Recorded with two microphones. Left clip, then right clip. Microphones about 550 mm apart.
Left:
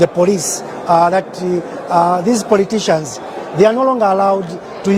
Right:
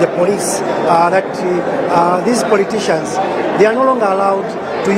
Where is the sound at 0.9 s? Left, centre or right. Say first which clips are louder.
Left 3 dB; left.